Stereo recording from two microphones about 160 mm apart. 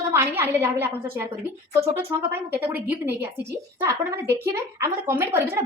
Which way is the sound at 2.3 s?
15° right (ahead or behind).